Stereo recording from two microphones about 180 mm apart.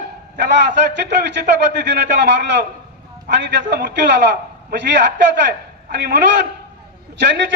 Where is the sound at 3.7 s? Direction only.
70° right (ahead or behind).